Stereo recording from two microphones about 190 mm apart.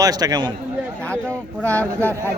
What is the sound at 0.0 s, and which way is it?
Speech, 20° right (ahead or behind).